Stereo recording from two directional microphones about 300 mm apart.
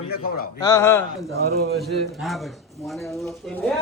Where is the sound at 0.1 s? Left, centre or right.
Left.